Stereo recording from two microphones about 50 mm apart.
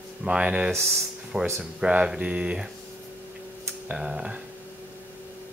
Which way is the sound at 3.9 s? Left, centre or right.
Centre.